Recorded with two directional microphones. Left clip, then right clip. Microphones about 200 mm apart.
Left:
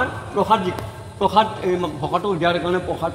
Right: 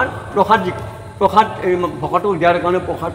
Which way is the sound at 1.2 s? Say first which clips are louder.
Right 4 dB; 30° left (ahead or behind).